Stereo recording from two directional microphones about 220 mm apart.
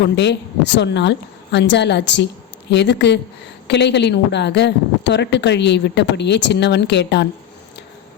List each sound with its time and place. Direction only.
0.0 s a woman's voice: 50° left (ahead or behind)